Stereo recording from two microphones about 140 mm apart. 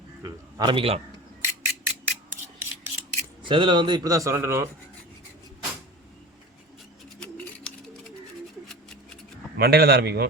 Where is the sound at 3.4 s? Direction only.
35° right (ahead or behind); by 4.6 s 20° right (ahead or behind).